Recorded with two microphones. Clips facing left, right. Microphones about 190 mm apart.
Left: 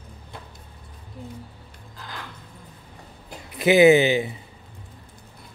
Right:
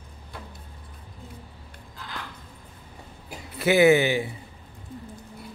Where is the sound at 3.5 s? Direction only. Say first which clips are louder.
Left 3 dB; 15° left (ahead or behind).